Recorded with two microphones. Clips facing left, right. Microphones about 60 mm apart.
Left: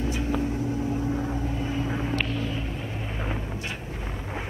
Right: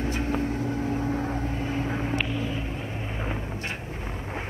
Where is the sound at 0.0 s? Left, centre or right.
Right.